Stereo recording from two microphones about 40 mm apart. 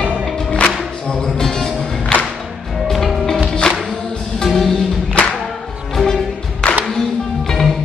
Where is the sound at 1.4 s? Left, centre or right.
Centre.